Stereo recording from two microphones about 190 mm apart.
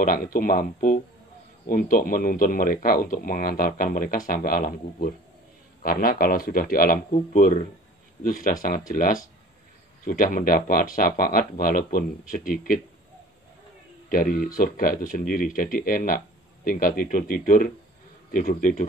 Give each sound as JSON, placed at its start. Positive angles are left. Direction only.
{"t": 0.0, "sound": "speech", "side_deg": 45}
{"t": 14.0, "sound": "speech", "side_deg": 45}